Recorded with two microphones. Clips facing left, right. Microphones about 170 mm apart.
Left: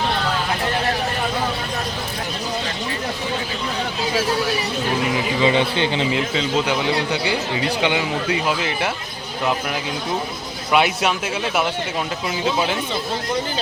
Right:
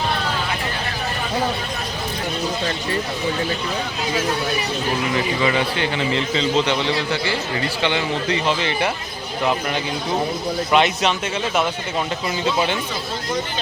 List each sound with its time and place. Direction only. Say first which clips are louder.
5.1 s speech: left 2 dB; 20° left (ahead or behind)
6.1 s speech: right 1 dB; 5° left (ahead or behind)
10.7 s speech: even; 5° left (ahead or behind)